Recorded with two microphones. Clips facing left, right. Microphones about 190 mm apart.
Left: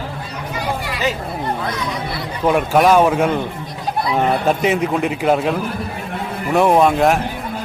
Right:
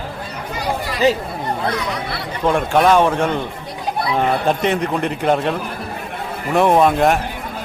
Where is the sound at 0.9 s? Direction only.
35° right (ahead or behind).